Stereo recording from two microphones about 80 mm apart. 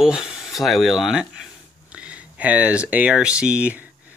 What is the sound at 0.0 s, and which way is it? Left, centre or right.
Speech, centre.